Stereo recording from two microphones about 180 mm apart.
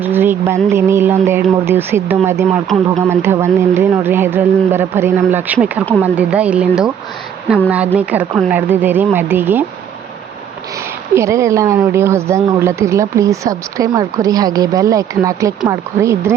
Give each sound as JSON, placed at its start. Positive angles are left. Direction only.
{"t": 0.0, "sound": "a woman's voice", "side_deg": -10}
{"t": 7.9, "sound": "a woman's voice", "side_deg": -10}
{"t": 11.1, "sound": "a woman's voice", "side_deg": -15}